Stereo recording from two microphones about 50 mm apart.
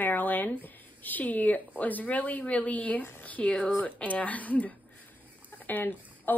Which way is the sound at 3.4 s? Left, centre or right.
Centre.